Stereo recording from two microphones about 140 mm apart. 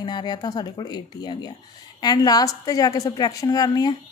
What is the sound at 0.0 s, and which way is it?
A woman's voice, 30° left (ahead or behind).